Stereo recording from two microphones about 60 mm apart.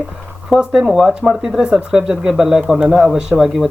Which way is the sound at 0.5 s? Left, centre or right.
Centre.